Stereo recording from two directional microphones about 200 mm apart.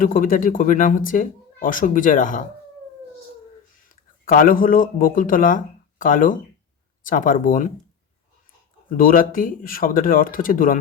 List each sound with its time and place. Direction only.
0.0 s speech: 45° left (ahead or behind)
3.8 s speech: 45° left (ahead or behind)
8.9 s speech: 45° left (ahead or behind)